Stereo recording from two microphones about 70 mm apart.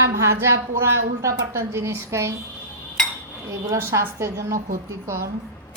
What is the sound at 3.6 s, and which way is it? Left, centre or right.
A woman's voice, right.